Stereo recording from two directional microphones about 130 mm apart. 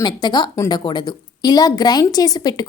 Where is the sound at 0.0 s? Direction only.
35° left (ahead or behind).